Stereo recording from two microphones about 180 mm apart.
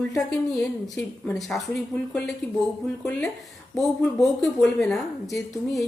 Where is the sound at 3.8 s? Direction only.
20° left (ahead or behind).